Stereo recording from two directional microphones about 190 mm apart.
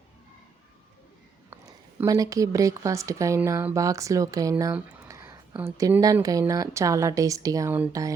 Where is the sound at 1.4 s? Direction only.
15° right (ahead or behind).